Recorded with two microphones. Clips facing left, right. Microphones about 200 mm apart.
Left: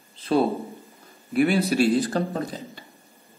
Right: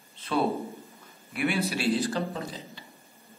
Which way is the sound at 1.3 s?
40° left (ahead or behind).